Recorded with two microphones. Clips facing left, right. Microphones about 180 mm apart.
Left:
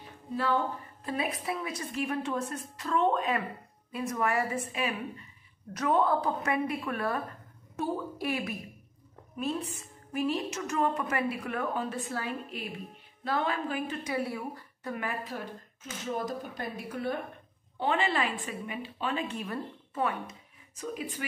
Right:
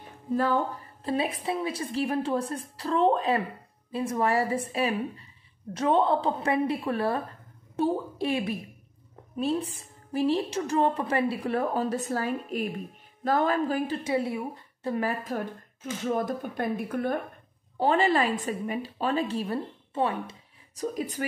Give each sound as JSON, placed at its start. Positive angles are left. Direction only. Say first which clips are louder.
{"t": 0.3, "sound": "speech", "louder": "right 4 dB", "side_deg": -45}
{"t": 1.0, "sound": "a woman's voice", "louder": "right 5 dB", "side_deg": -30}
{"t": 17.7, "sound": "a woman's voice", "louder": "right 6 dB", "side_deg": -40}